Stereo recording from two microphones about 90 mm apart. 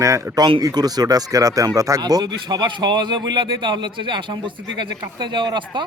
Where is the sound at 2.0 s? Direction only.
55° right (ahead or behind).